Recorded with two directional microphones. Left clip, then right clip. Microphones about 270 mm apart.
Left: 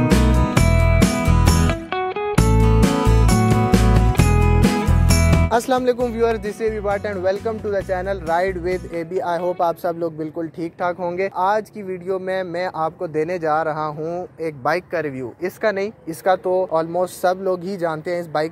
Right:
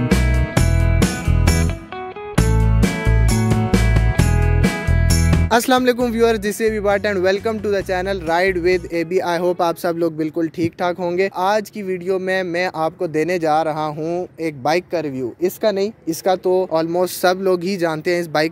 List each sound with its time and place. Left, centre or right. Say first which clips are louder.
0.0 s music: left 3 dB; centre
5.5 s speech: right 4 dB; right
6.2 s speech: right 4 dB; right
7.2 s speech: right 3 dB; right